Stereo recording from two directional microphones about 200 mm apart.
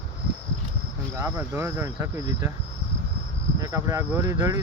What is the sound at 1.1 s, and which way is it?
Speech, 10° right (ahead or behind).